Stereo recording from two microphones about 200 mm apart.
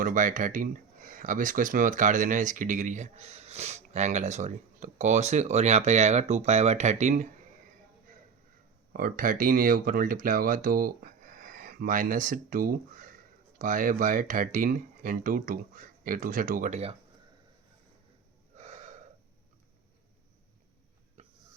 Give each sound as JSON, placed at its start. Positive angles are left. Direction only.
{"t": 0.0, "sound": "speech", "side_deg": -40}
{"t": 8.9, "sound": "speech", "side_deg": -45}
{"t": 18.5, "sound": "gasp", "side_deg": -35}
{"t": 21.2, "sound": "a sound", "side_deg": -35}